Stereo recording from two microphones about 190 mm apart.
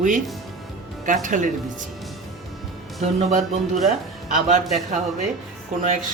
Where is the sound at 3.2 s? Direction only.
40° right (ahead or behind).